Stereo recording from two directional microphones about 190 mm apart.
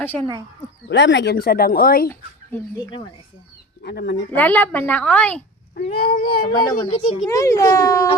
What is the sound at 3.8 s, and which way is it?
Speech, 60° left (ahead or behind).